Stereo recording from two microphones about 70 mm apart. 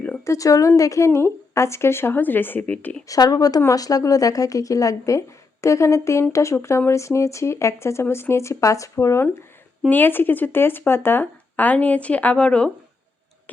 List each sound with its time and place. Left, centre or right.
0.3 s speech: left
3.1 s a woman's voice: left
9.9 s speech: left